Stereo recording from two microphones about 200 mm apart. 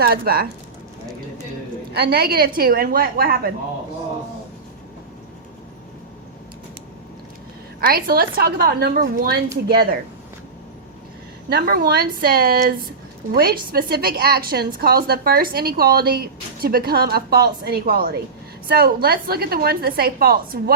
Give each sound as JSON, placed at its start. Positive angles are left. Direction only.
{"t": 0.0, "sound": "a woman's voice", "side_deg": -50}
{"t": 1.9, "sound": "a woman's voice", "side_deg": -50}
{"t": 7.8, "sound": "a woman's voice", "side_deg": -50}
{"t": 11.4, "sound": "a woman's voice", "side_deg": -50}